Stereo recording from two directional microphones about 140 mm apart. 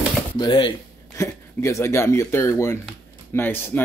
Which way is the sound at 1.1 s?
20° left (ahead or behind).